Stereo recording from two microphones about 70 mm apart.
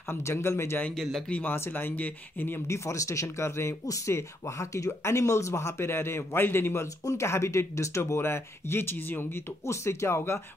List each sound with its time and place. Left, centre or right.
0.1 s speech: left
0.9 s speech: centre
1.3 s speech: left
2.7 s speech: left